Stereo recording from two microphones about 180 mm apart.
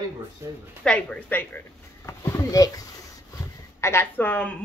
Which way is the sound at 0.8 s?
5° left (ahead or behind).